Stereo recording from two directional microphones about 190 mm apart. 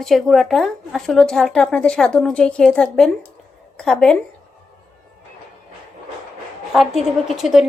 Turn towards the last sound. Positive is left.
turn(degrees=0)  # may be behind; listen again after turning